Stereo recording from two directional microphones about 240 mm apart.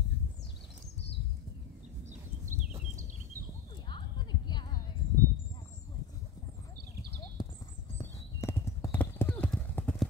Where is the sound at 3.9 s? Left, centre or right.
Centre.